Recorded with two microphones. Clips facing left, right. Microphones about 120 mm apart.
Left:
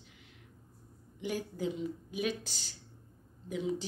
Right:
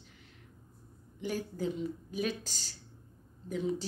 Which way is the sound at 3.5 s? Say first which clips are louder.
Right 1 dB; 10° left (ahead or behind).